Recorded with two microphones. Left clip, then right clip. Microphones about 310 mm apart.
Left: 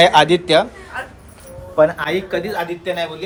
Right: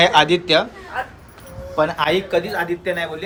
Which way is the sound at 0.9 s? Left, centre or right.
Right.